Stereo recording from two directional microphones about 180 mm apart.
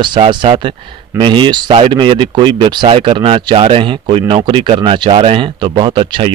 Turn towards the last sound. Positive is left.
turn(degrees=-25)  # may be behind; listen again after turning